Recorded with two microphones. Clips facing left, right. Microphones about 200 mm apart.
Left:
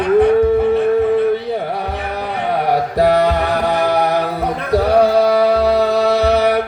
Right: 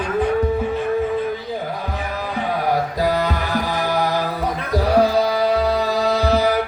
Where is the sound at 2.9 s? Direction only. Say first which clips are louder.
Left 7 dB; 70° left (ahead or behind).